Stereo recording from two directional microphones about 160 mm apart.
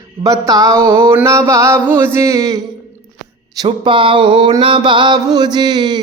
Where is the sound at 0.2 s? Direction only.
20° right (ahead or behind).